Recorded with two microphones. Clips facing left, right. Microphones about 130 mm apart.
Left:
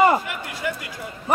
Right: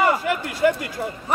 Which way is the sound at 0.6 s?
50° right (ahead or behind).